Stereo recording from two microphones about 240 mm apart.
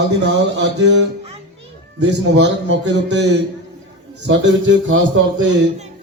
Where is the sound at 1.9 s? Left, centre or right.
Right.